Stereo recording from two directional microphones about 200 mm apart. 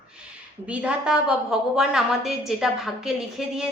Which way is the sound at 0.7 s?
5° right (ahead or behind).